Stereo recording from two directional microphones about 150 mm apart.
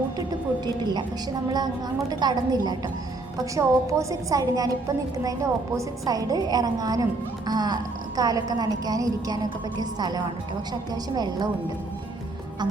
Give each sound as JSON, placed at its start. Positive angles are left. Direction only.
{"t": 0.3, "sound": "a woman's voice", "side_deg": -25}